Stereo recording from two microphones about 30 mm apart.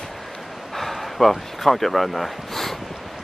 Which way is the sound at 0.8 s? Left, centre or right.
Centre.